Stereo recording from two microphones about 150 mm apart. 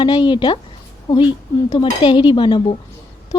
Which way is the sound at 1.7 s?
35° left (ahead or behind).